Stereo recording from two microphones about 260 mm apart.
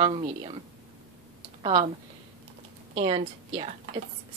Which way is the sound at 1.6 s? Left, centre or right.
Centre.